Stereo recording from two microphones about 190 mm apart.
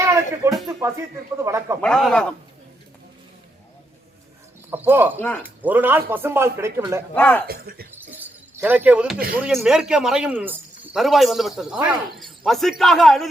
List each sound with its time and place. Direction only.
0.0 s a sound: 15° right (ahead or behind)
0.5 s music: centre (ahead or behind)
1.4 s a man's voice: 15° right (ahead or behind)
1.8 s a man's voice: centre (ahead or behind)
4.7 s a man's voice: 10° right (ahead or behind)
5.2 s speech: 5° left (ahead or behind)
5.6 s a man's voice: 10° right (ahead or behind)
7.1 s speech: 5° left (ahead or behind)
7.4 s speech: 55° right (ahead or behind)
8.1 s shatter: 10° right (ahead or behind)
9.3 s a man's voice: 5° right (ahead or behind)